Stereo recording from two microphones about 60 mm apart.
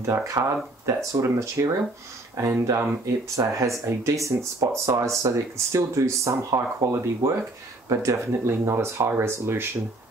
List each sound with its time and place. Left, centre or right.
0.0 s speech: right